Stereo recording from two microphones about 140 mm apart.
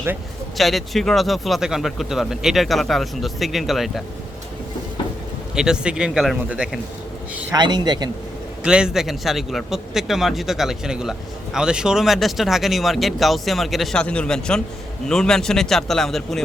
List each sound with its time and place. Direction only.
0.5 s speech: centre (ahead or behind)
5.5 s speech: 5° right (ahead or behind)
7.5 s a man's voice: 30° right (ahead or behind)
8.6 s speech: 5° right (ahead or behind)